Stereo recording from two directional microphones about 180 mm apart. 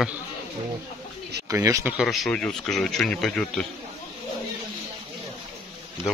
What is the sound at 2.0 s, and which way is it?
Speech, centre (ahead or behind).